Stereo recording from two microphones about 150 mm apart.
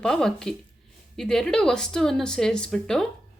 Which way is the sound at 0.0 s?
5° left (ahead or behind).